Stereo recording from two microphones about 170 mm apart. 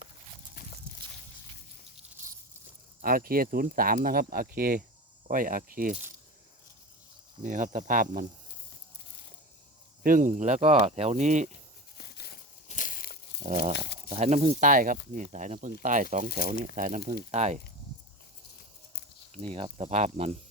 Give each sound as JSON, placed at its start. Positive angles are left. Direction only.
{"t": 3.0, "sound": "speech", "side_deg": -55}
{"t": 7.4, "sound": "speech", "side_deg": -50}
{"t": 10.0, "sound": "speech", "side_deg": -50}
{"t": 11.9, "sound": "a sound", "side_deg": 70}
{"t": 12.6, "sound": "a sound", "side_deg": 50}
{"t": 13.4, "sound": "speech", "side_deg": -45}
{"t": 13.7, "sound": "a sound", "side_deg": 80}
{"t": 14.1, "sound": "speech", "side_deg": -40}
{"t": 17.3, "sound": "speech", "side_deg": -40}
{"t": 19.3, "sound": "speech", "side_deg": -35}